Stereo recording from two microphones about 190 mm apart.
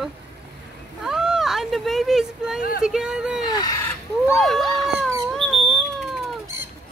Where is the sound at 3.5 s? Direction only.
20° left (ahead or behind).